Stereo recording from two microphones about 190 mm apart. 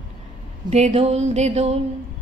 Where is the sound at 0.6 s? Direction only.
35° right (ahead or behind).